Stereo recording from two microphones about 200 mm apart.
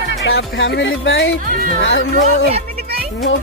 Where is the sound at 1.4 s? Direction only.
40° right (ahead or behind).